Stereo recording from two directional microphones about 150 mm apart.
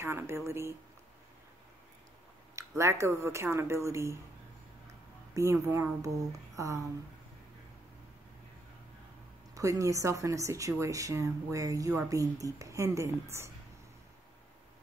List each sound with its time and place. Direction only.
0.0 s speech: 15° right (ahead or behind)
2.5 s speech: 20° right (ahead or behind)
5.3 s speech: 20° right (ahead or behind)
9.6 s speech: 20° right (ahead or behind)